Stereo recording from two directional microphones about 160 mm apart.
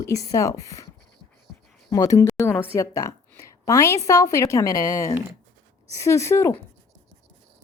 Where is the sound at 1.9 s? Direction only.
20° left (ahead or behind).